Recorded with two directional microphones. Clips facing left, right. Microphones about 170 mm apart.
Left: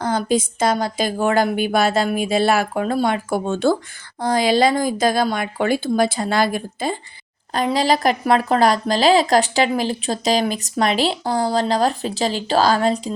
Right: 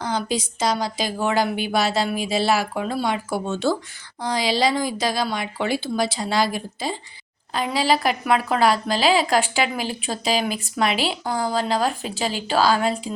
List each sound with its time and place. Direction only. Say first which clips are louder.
0.0 s a woman's voice: left 5 dB; 50° left (ahead or behind)